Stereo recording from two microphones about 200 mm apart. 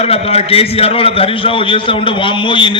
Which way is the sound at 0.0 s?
30° left (ahead or behind).